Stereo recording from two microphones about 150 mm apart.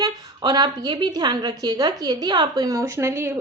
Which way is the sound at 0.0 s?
25° right (ahead or behind).